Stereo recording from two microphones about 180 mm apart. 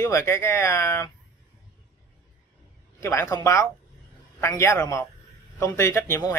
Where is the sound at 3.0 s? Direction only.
15° left (ahead or behind).